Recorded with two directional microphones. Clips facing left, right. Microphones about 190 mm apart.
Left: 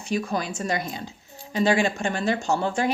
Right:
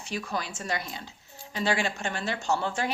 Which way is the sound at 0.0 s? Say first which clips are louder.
Left 8 dB; 45° left (ahead or behind).